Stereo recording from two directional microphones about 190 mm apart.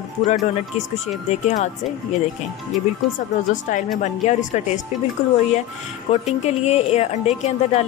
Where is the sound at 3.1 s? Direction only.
45° left (ahead or behind).